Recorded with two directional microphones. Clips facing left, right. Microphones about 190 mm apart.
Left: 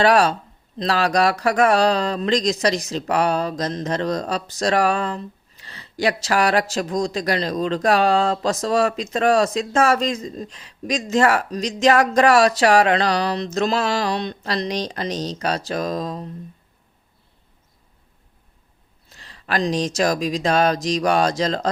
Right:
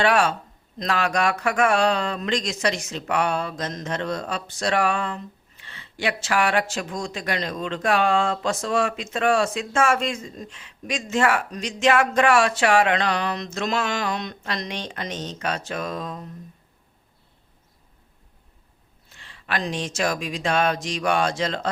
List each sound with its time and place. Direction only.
0.0 s speech: 35° left (ahead or behind)
19.0 s speech: 40° left (ahead or behind)